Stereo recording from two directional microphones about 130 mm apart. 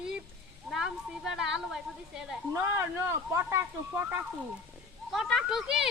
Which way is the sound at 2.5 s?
20° right (ahead or behind).